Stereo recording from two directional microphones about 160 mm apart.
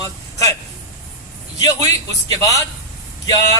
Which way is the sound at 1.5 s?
25° left (ahead or behind).